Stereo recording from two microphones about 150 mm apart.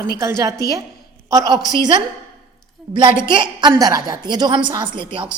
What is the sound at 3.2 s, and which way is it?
A woman's voice, 30° right (ahead or behind).